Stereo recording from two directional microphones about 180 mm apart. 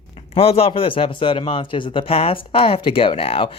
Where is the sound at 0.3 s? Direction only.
30° left (ahead or behind).